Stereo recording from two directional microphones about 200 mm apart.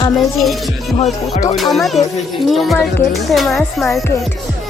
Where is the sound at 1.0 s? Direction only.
35° left (ahead or behind).